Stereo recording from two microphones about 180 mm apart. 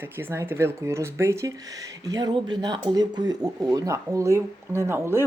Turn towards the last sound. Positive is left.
turn(degrees=-15)  # may be behind; listen again after turning